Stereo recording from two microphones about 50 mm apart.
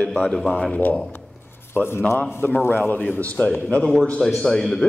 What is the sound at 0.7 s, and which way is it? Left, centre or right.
Speech, left.